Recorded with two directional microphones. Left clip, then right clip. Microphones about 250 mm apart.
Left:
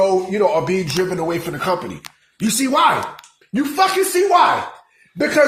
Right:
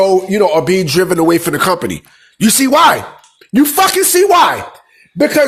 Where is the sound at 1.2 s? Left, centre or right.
Right.